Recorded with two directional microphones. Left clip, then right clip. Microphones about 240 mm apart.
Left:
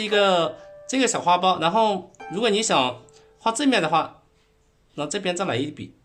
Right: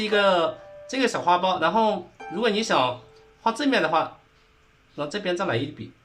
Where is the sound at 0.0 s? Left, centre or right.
Left.